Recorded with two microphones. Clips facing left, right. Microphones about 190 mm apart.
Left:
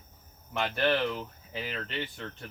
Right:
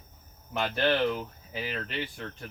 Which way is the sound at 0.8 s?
Centre (ahead or behind).